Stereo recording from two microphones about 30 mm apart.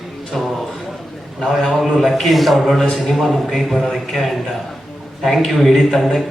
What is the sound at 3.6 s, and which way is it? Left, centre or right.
Speech, centre.